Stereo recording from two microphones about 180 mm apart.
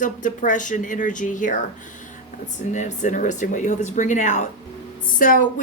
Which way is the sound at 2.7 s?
45° left (ahead or behind).